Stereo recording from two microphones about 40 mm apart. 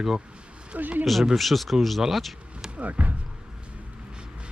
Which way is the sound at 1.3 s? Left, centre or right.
Centre.